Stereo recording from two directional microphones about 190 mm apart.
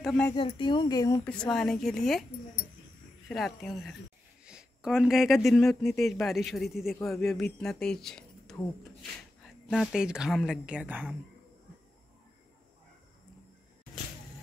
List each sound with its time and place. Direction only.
0.4 s speech: 25° left (ahead or behind)
1.2 s speech: 5° left (ahead or behind)
3.3 s speech: centre (ahead or behind)